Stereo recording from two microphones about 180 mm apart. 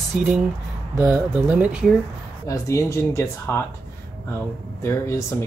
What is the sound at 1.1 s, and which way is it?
Speech, 10° right (ahead or behind).